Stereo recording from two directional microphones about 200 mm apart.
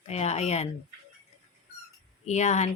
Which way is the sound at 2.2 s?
35° left (ahead or behind).